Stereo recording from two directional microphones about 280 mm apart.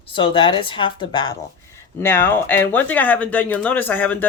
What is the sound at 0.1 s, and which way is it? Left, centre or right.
Speech, centre.